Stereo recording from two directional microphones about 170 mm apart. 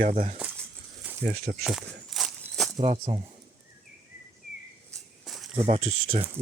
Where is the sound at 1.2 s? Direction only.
65° right (ahead or behind).